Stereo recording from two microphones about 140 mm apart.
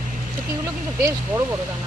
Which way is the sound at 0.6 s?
20° right (ahead or behind).